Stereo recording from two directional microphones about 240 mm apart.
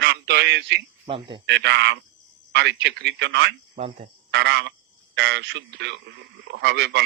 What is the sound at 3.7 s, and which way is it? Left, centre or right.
Speech, right.